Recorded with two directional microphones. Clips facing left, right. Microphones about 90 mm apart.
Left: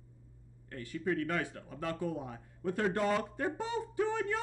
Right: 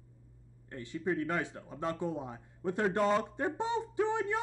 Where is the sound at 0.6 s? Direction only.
20° right (ahead or behind).